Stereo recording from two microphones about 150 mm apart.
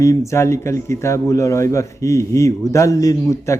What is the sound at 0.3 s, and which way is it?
A man's voice, 20° left (ahead or behind).